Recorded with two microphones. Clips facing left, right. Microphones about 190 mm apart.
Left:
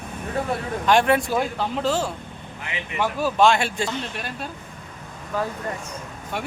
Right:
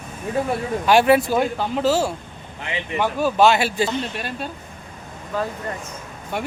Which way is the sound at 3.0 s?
Centre (ahead or behind).